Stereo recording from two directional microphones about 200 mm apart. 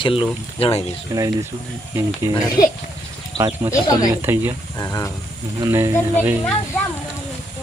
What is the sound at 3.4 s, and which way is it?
Speech, 20° right (ahead or behind).